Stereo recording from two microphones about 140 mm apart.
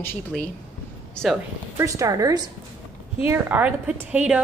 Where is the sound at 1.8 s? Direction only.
20° right (ahead or behind).